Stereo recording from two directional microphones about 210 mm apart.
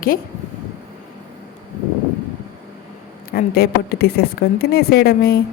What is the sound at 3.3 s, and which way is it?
Speech, 45° left (ahead or behind).